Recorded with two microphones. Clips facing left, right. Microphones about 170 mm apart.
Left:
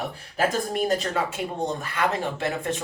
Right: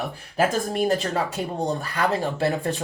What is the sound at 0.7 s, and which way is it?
Speech, 35° right (ahead or behind).